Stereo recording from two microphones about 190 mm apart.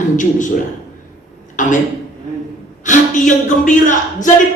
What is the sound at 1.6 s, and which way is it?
Speech, 40° left (ahead or behind).